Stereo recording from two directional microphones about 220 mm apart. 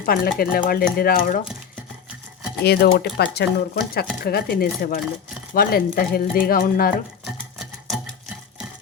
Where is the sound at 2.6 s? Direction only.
45° left (ahead or behind).